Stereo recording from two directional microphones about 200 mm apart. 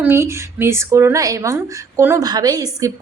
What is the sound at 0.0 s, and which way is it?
Speech, 10° right (ahead or behind).